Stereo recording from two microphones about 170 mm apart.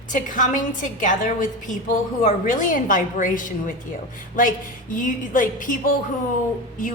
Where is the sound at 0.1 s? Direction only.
50° left (ahead or behind).